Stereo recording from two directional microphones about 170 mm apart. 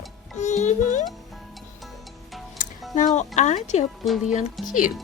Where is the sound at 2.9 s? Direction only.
45° left (ahead or behind).